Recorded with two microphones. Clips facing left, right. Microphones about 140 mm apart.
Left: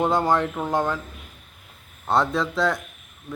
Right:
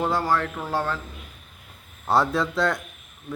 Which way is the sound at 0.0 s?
20° left (ahead or behind).